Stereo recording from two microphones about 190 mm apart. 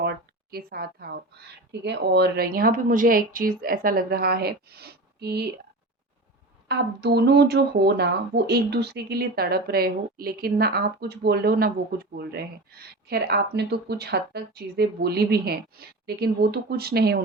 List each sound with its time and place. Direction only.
0.0 s a sound: 55° right (ahead or behind)
1.8 s a woman's voice: 60° right (ahead or behind)
6.7 s speech: 60° right (ahead or behind)